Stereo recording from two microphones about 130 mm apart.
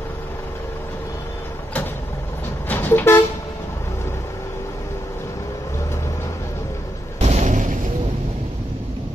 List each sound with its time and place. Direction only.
2.7 s vehicle: 15° left (ahead or behind)
7.2 s artillery fire: 60° right (ahead or behind)